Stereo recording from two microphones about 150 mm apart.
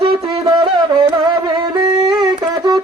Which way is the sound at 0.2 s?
25° right (ahead or behind).